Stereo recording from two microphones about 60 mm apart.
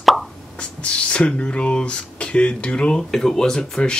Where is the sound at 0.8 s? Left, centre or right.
Centre.